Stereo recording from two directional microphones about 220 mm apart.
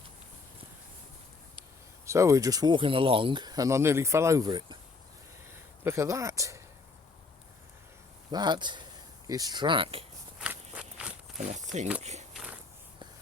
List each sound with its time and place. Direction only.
2.0 s speech: 15° right (ahead or behind)
5.8 s speech: 10° right (ahead or behind)
8.3 s speech: 20° right (ahead or behind)
10.4 s walk: 5° right (ahead or behind)
11.3 s speech: 35° right (ahead or behind)
12.3 s a sound: centre (ahead or behind)